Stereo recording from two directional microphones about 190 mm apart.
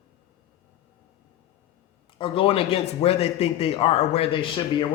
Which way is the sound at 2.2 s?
30° left (ahead or behind).